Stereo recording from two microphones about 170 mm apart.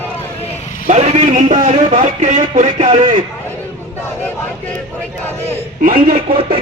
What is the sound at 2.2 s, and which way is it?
Speech, 45° right (ahead or behind).